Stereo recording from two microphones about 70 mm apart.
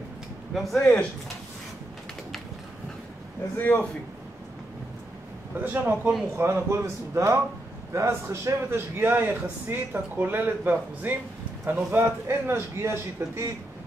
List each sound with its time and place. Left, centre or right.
0.5 s speech: centre
0.7 s speech: centre
3.5 s speech: left
5.6 s a man's voice: right
11.9 s a man's voice: right